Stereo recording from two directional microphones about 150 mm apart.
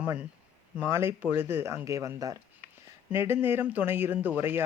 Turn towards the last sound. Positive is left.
turn(degrees=-15)  # may be behind; listen again after turning